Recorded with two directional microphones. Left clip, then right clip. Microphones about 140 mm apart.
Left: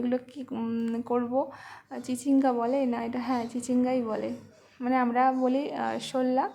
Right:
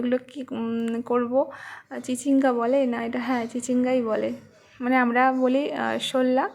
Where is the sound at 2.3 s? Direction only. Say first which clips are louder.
Right 4 dB; 15° right (ahead or behind).